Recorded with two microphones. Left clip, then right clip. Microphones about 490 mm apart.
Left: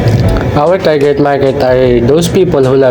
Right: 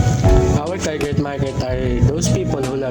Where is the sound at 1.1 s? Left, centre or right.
Right.